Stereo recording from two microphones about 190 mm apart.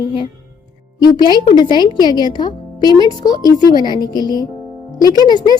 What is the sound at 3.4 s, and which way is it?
Speech, 20° left (ahead or behind).